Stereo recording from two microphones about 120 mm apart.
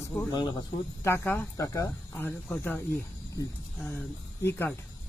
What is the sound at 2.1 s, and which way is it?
Speech, 15° left (ahead or behind).